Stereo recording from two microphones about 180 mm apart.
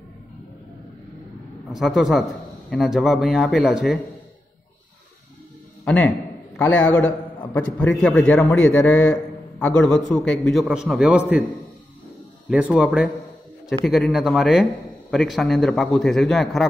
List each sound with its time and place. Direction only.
1.7 s a man's voice: centre (ahead or behind)
5.9 s a sound: 5° left (ahead or behind)
6.6 s a man's voice: 5° left (ahead or behind)
8.0 s a man's voice: 5° left (ahead or behind)
12.4 s a man's voice: 5° right (ahead or behind)